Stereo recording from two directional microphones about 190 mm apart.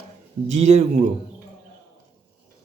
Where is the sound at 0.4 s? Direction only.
35° right (ahead or behind).